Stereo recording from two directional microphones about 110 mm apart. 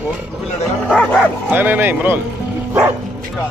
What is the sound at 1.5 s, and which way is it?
Speech, 15° right (ahead or behind).